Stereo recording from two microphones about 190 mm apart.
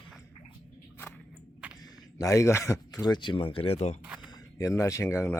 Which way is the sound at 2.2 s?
15° left (ahead or behind).